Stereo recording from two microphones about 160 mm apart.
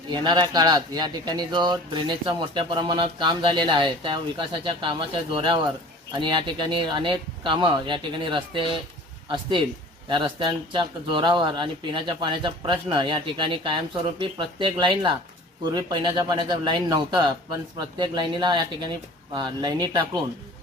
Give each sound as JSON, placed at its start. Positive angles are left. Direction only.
{"t": 0.1, "sound": "speech", "side_deg": -25}
{"t": 10.1, "sound": "speech", "side_deg": -30}